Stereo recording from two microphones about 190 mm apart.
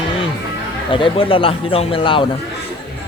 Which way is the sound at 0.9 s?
30° left (ahead or behind).